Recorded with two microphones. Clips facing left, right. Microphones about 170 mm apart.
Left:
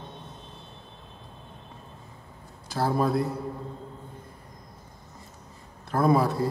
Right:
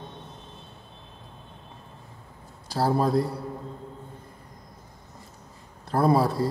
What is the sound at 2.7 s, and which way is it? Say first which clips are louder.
Speech: right 2 dB; 35° right (ahead or behind).